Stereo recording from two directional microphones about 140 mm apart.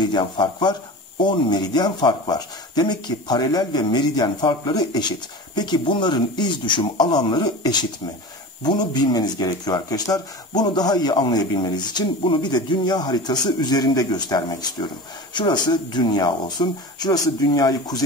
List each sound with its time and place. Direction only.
0.0 s speech: 30° left (ahead or behind)